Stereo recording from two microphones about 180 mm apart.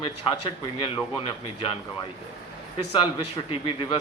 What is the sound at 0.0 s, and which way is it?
A man's voice, 25° left (ahead or behind).